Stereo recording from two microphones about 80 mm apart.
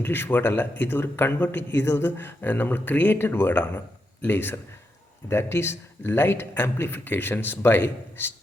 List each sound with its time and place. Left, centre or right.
0.0 s a man's voice: left